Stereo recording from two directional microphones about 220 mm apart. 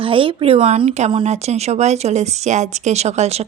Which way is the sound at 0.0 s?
25° right (ahead or behind).